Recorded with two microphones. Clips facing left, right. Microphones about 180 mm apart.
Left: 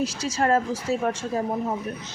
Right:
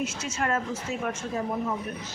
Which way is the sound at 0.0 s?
35° left (ahead or behind).